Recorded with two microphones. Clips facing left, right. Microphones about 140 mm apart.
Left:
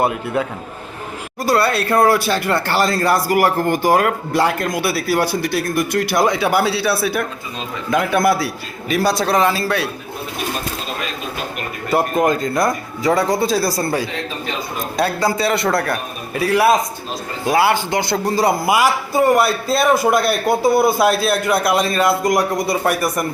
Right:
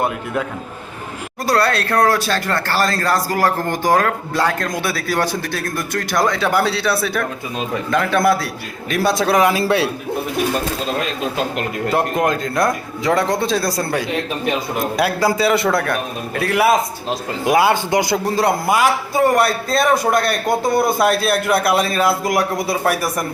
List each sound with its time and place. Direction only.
1.5 s speech: 5° left (ahead or behind); by 9.9 s 25° right (ahead or behind)
11.9 s a man's voice: centre (ahead or behind)
14.9 s a man's voice: 5° right (ahead or behind)
17.1 s speech: 20° right (ahead or behind)
18.3 s a man's voice: centre (ahead or behind)